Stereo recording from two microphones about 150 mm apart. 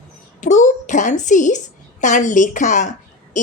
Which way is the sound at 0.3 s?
55° left (ahead or behind).